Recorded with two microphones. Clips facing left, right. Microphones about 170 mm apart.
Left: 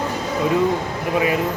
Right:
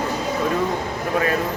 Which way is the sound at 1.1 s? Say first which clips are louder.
Left 2 dB; 15° left (ahead or behind).